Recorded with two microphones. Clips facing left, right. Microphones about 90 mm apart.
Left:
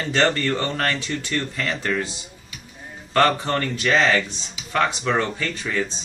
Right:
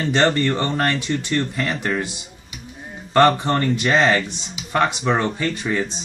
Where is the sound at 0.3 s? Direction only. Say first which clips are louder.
Right 3 dB; 20° right (ahead or behind).